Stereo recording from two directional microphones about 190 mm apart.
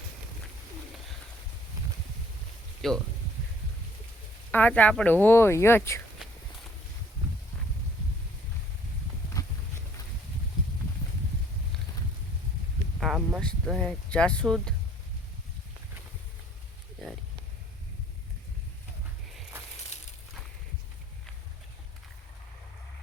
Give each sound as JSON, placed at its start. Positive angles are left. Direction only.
{"t": 2.8, "sound": "speech", "side_deg": 0}
{"t": 4.5, "sound": "speech", "side_deg": 10}
{"t": 9.4, "sound": "clip-clop", "side_deg": 20}
{"t": 13.0, "sound": "speech", "side_deg": 0}